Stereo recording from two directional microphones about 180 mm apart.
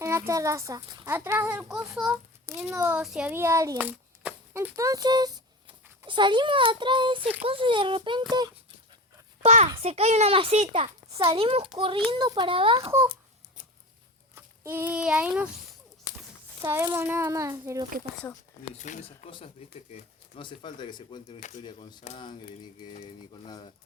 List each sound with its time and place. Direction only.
0.0 s a child's voice: 15° right (ahead or behind)
9.4 s a child's voice: 40° right (ahead or behind)
14.3 s speech: 15° right (ahead or behind)
16.6 s speech: 15° right (ahead or behind)
18.7 s speech: 40° left (ahead or behind); by 22.0 s 25° left (ahead or behind)
22.0 s speech: 35° left (ahead or behind)
22.3 s speech: 25° left (ahead or behind)